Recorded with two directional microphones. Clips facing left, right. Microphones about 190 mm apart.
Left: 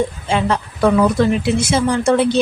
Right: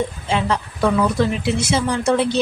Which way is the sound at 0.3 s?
50° left (ahead or behind).